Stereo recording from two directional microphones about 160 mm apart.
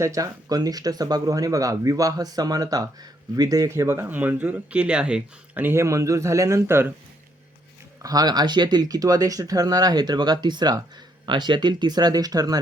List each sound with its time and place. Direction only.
0.0 s speech: 20° right (ahead or behind)
8.0 s speech: 25° right (ahead or behind)